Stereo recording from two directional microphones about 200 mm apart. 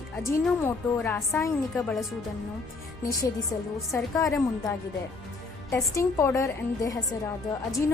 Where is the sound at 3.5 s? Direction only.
20° left (ahead or behind).